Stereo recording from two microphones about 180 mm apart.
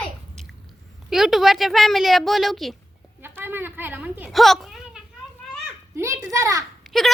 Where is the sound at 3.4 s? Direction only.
10° right (ahead or behind).